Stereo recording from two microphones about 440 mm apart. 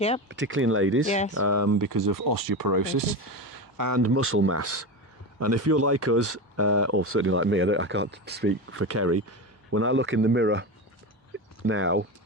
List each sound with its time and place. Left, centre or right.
0.3 s speech: right
1.0 s speech: centre
1.3 s speech: right